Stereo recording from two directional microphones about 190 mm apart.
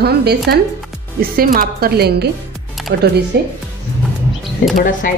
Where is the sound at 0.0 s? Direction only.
60° right (ahead or behind).